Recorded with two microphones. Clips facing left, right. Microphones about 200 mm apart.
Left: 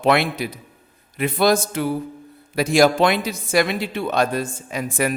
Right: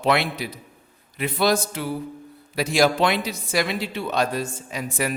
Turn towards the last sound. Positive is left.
turn(degrees=50)  # may be behind; listen again after turning